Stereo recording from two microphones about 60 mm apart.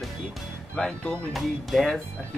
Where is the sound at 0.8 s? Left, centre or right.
Centre.